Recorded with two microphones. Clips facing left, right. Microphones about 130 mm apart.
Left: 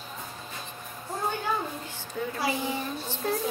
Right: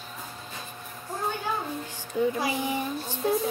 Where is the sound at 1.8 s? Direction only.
15° right (ahead or behind).